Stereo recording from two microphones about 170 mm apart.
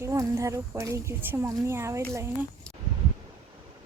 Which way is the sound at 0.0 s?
15° right (ahead or behind).